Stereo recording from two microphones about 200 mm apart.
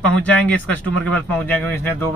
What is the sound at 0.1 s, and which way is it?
A man's voice, 5° left (ahead or behind).